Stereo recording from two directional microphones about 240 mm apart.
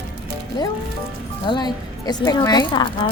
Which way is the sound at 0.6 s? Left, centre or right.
Centre.